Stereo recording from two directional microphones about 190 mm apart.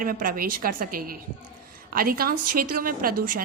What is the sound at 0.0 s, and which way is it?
A woman's voice, 45° right (ahead or behind).